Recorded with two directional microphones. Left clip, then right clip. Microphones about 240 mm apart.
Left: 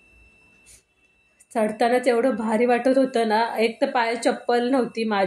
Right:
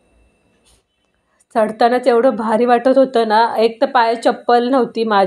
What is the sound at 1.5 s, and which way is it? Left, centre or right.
A woman's voice, centre.